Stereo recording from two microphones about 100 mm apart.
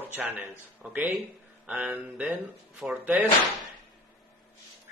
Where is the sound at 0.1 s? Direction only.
20° right (ahead or behind).